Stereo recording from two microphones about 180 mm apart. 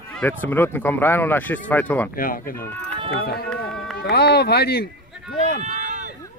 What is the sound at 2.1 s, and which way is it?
Speech, 50° left (ahead or behind).